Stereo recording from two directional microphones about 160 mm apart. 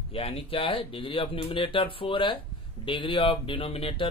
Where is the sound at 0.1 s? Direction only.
40° left (ahead or behind).